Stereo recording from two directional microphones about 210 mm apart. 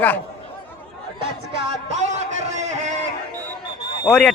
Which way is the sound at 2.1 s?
35° right (ahead or behind).